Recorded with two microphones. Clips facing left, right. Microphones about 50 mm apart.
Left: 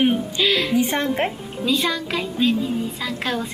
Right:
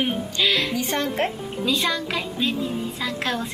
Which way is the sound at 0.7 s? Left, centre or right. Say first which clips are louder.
Left 5 dB; centre.